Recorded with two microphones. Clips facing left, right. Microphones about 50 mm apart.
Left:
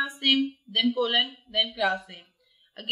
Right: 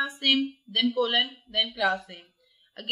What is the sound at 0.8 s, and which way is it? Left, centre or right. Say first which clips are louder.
Speech: even; centre.